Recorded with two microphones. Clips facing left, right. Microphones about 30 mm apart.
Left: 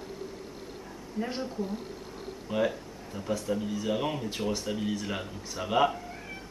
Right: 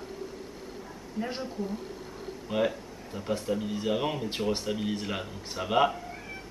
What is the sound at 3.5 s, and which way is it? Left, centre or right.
A man's voice, centre.